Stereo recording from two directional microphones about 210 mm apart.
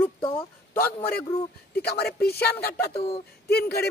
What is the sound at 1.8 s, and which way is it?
Speech, 50° left (ahead or behind).